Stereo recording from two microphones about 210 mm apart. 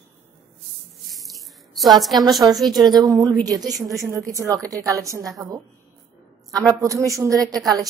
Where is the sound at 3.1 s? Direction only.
20° right (ahead or behind).